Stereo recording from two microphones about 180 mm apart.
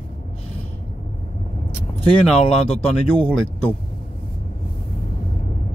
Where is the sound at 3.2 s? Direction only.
10° left (ahead or behind).